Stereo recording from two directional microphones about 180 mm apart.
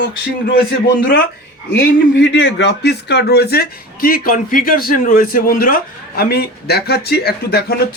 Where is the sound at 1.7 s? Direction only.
70° left (ahead or behind).